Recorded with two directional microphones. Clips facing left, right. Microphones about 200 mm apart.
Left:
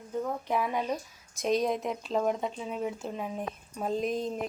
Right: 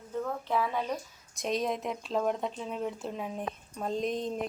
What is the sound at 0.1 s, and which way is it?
Speech, 15° left (ahead or behind).